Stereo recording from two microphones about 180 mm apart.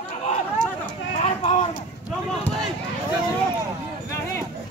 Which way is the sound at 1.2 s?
40° left (ahead or behind).